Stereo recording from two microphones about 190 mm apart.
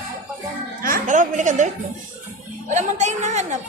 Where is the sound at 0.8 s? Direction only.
45° right (ahead or behind).